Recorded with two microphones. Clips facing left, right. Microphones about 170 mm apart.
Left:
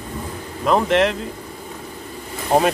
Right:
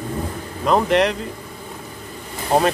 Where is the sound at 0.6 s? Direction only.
Centre (ahead or behind).